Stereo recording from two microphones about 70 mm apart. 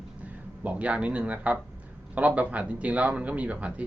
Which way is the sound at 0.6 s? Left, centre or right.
Centre.